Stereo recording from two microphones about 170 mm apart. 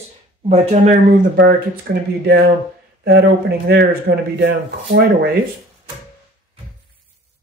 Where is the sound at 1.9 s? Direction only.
80° right.